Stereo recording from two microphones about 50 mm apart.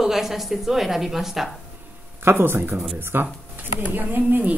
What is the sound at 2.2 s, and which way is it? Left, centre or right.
Speech, right.